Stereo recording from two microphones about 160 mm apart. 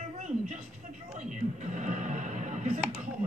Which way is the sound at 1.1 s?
50° right (ahead or behind).